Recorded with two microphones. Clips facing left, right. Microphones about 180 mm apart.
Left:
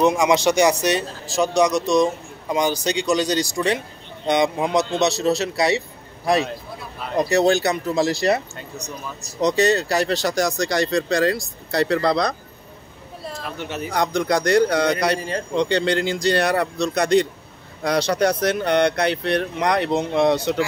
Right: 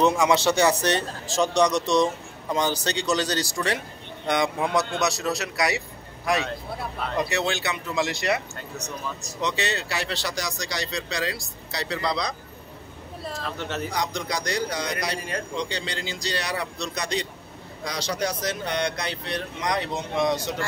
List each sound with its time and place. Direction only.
0.0 s a man's voice: 15° left (ahead or behind)
7.2 s speech: 40° left (ahead or behind)
8.5 s speech: 10° left (ahead or behind)
9.4 s speech: 40° left (ahead or behind)
13.4 s a man's voice: 15° left (ahead or behind)
13.9 s speech: 55° left (ahead or behind)